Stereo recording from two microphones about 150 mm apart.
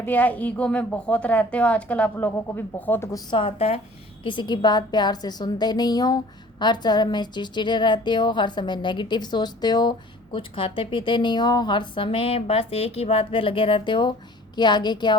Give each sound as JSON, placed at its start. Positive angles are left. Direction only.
{"t": 0.0, "sound": "speech", "side_deg": 10}
{"t": 3.2, "sound": "a woman's voice", "side_deg": 35}